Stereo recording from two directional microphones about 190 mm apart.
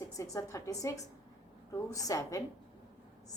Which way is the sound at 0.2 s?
15° left (ahead or behind).